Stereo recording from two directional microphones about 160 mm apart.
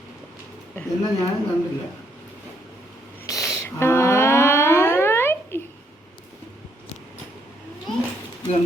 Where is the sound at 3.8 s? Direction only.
15° left (ahead or behind).